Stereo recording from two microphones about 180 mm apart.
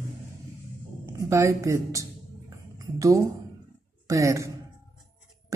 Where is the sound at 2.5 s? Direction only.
20° right (ahead or behind).